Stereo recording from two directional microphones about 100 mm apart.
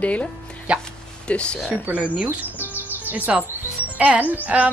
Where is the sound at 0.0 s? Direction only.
15° left (ahead or behind).